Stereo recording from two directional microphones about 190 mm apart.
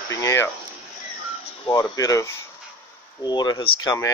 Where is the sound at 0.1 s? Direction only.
15° left (ahead or behind).